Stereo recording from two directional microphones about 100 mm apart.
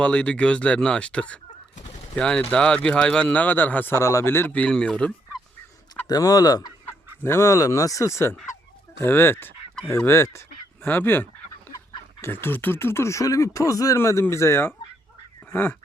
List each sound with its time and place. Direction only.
0.0 s speech: 10° left (ahead or behind)
1.9 s bird: 90° left
2.1 s speech: 10° left (ahead or behind)
6.1 s speech: 40° left (ahead or behind)
6.8 s fowl: 25° left (ahead or behind)
9.0 s speech: 25° left (ahead or behind)
15.4 s goose: 20° left (ahead or behind)